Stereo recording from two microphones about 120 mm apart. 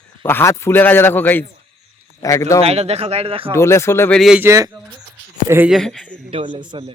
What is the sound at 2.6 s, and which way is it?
Speech, 60° right (ahead or behind).